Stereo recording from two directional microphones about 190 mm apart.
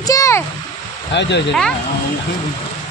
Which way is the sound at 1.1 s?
65° left (ahead or behind).